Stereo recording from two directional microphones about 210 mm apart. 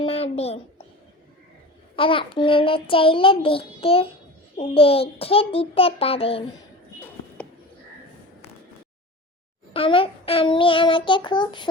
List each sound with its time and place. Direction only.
0.0 s a sound: 25° left (ahead or behind)
2.0 s a child's voice: 25° left (ahead or behind)
9.7 s a child's voice: 25° left (ahead or behind)